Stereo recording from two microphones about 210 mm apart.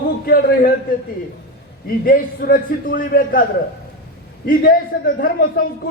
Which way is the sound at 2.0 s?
40° left (ahead or behind).